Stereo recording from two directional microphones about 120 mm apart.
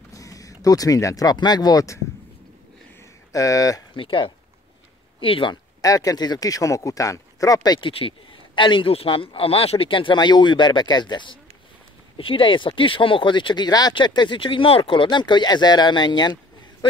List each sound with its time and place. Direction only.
0.1 s speech: 30° left (ahead or behind)
3.3 s speech: 30° left (ahead or behind)
3.9 s speech: 45° left (ahead or behind)
5.8 s speech: 30° left (ahead or behind)